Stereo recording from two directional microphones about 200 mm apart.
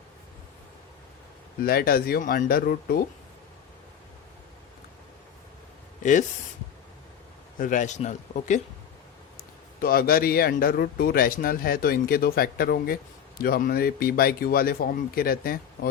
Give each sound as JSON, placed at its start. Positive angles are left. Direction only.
{"t": 1.6, "sound": "speech", "side_deg": 50}
{"t": 6.0, "sound": "speech", "side_deg": 40}
{"t": 7.6, "sound": "speech", "side_deg": 40}
{"t": 9.8, "sound": "speech", "side_deg": 45}